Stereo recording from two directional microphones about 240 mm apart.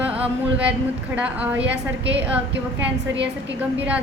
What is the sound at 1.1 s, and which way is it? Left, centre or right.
Female singing, centre.